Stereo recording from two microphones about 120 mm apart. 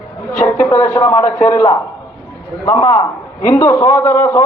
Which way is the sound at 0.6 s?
25° left (ahead or behind).